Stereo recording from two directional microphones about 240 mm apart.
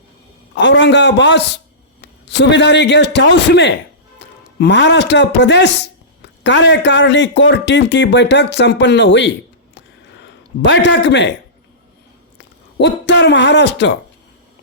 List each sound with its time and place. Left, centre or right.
0.5 s a man's voice: left
10.6 s speech: left
12.4 s speech: left